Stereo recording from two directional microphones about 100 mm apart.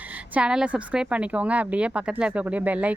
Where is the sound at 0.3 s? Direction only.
10° right (ahead or behind).